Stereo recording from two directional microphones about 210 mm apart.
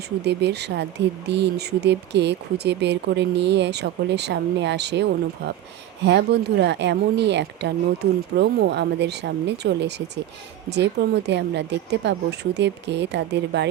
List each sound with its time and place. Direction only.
0.3 s speech: 55° right (ahead or behind)
6.1 s a woman's voice: 55° right (ahead or behind)